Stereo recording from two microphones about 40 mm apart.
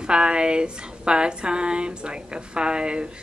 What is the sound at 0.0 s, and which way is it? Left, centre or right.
Speech, right.